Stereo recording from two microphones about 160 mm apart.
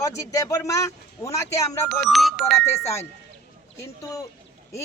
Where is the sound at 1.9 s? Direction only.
Centre (ahead or behind).